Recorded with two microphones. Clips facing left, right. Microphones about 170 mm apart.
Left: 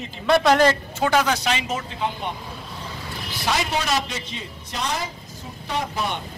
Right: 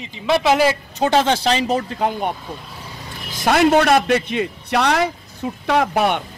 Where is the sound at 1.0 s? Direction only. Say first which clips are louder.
Right 4 dB; 30° right (ahead or behind); by 6.2 s 70° right (ahead or behind).